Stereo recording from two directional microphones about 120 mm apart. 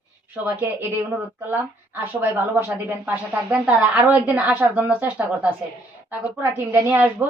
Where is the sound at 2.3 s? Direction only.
15° right (ahead or behind).